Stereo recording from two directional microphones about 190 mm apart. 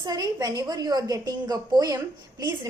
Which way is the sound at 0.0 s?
20° right (ahead or behind).